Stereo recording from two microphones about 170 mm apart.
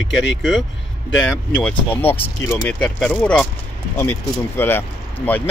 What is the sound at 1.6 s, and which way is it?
Speech, 10° left (ahead or behind).